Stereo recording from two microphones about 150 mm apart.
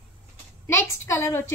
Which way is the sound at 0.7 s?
15° left (ahead or behind).